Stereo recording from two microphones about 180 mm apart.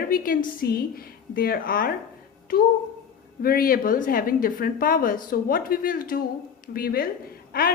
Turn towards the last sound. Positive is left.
turn(degrees=55)  # may be behind; listen again after turning